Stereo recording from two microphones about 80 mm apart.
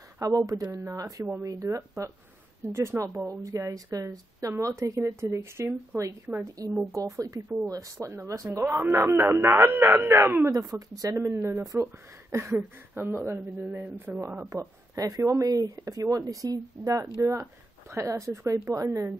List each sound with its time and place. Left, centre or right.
0.2 s speech: right
10.5 s speech: right
11.2 s speech: right
14.1 s speech: centre
14.5 s speech: right
17.0 s speech: right